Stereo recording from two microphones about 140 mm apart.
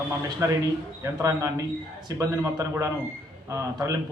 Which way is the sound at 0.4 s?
20° right (ahead or behind).